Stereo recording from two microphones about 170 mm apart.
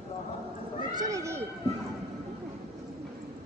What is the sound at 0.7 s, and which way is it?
Speech, 20° right (ahead or behind).